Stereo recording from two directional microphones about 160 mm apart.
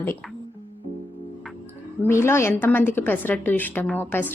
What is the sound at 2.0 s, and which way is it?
A woman's voice, 15° left (ahead or behind).